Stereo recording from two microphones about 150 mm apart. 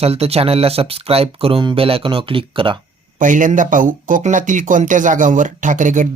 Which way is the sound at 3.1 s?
60° right (ahead or behind).